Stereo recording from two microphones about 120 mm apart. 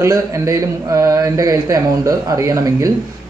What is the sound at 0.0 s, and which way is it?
Speech, 30° right (ahead or behind).